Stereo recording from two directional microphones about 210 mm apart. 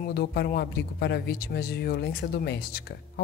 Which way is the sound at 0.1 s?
50° left (ahead or behind).